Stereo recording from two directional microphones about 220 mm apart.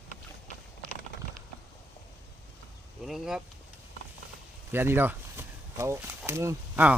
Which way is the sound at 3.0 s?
Centre (ahead or behind).